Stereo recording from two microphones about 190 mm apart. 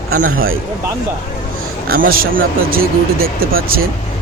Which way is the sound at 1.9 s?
50° right (ahead or behind).